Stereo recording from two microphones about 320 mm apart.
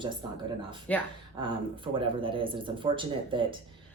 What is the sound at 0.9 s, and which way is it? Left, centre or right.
Speech, centre.